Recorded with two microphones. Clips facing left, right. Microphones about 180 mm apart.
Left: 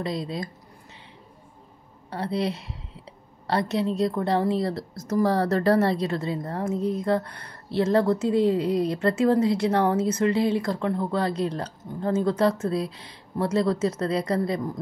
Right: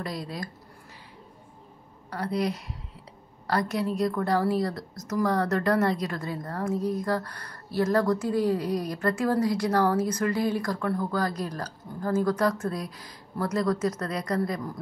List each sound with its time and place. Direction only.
0.0 s a woman's voice: 25° left (ahead or behind)
2.0 s a woman's voice: 25° left (ahead or behind)